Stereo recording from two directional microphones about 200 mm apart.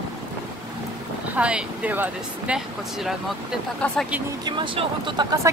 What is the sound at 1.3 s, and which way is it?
Speech, 5° right (ahead or behind).